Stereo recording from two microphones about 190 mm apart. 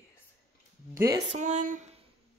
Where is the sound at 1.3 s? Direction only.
40° right (ahead or behind).